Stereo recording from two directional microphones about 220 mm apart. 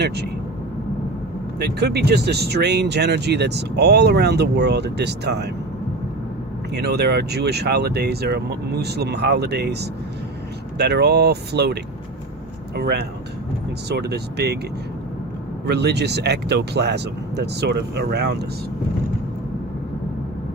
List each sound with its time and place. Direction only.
1.5 s speech: 50° right (ahead or behind)
6.7 s speech: 50° right (ahead or behind)
10.8 s speech: 50° right (ahead or behind)
15.6 s speech: 50° right (ahead or behind)